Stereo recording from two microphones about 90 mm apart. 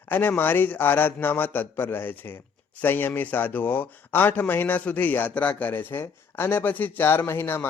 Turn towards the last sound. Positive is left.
turn(degrees=25)  # may be behind; listen again after turning